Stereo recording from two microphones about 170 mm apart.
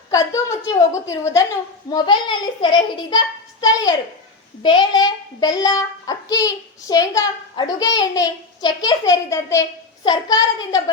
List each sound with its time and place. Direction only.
0.1 s a child's voice: 20° left (ahead or behind)